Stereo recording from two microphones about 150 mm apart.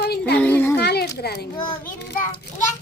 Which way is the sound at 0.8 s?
90° left.